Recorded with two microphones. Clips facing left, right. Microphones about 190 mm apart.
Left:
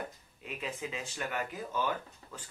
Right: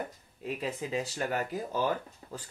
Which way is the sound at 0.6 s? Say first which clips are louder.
Right 5 dB; 40° right (ahead or behind).